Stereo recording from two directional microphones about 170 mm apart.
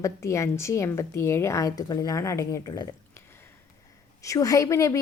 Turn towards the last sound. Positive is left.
turn(degrees=20)  # may be behind; listen again after turning